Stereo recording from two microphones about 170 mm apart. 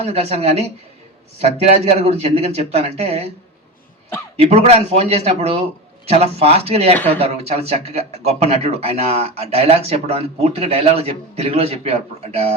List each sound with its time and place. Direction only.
0.0 s speech: 35° right (ahead or behind)
4.4 s speech: 35° right (ahead or behind)
6.9 s speech: 10° left (ahead or behind)
7.2 s speech: 35° right (ahead or behind)